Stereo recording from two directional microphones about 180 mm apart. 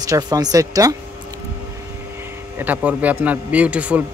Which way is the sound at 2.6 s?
10° right (ahead or behind).